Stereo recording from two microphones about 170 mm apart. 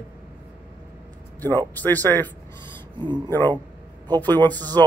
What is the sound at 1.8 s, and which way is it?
Speech, 10° left (ahead or behind).